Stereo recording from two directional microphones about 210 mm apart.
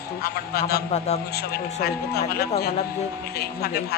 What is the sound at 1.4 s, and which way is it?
Speech, 50° left (ahead or behind).